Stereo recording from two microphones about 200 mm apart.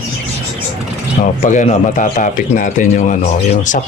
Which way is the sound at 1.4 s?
35° left (ahead or behind).